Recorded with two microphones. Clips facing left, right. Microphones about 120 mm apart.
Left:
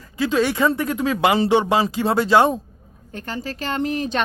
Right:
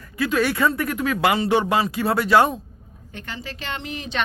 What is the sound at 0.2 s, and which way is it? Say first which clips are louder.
Speech: left 2 dB; 25° left (ahead or behind).